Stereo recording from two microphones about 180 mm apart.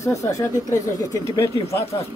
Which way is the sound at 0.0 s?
15° left (ahead or behind).